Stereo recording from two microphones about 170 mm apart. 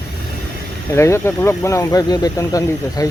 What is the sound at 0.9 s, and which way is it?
Speech, 15° left (ahead or behind).